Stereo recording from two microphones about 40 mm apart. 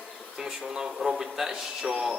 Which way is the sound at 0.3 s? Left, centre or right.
Centre.